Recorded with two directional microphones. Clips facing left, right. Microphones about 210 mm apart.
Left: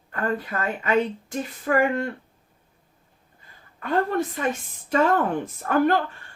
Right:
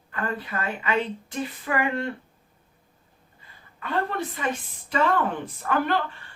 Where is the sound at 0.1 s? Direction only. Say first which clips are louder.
Left 4 dB; 45° left (ahead or behind).